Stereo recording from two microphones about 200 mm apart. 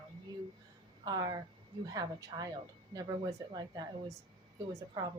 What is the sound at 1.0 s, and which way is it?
A woman's voice, 20° right (ahead or behind).